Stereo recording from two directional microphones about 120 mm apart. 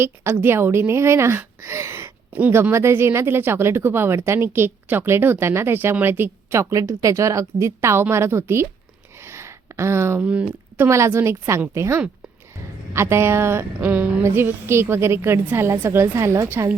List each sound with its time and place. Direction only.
0.0 s a woman's voice: 20° right (ahead or behind)
9.2 s a sound: 20° right (ahead or behind)
10.2 s speech: 10° right (ahead or behind)
10.8 s a woman's voice: 25° right (ahead or behind)